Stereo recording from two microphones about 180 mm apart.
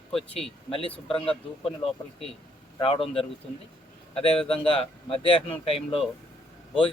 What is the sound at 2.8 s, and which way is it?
A man's voice, 30° left (ahead or behind).